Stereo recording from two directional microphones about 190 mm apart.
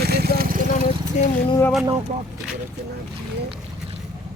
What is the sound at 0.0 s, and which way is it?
Vehicle, 55° right (ahead or behind).